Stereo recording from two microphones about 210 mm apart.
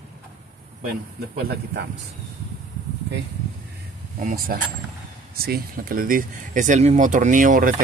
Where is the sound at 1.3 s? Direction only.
50° right (ahead or behind).